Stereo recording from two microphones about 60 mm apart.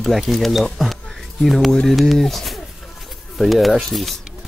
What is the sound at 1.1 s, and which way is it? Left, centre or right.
Music, centre.